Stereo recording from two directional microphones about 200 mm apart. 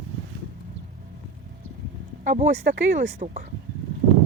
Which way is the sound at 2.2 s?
40° right (ahead or behind).